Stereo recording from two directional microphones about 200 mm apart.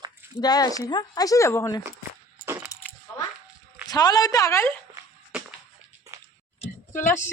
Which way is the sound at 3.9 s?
20° left (ahead or behind).